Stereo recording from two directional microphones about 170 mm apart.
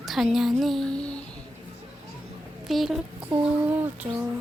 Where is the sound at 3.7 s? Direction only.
10° right (ahead or behind).